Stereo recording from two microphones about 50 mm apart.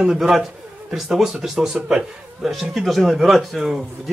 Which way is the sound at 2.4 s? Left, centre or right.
Centre.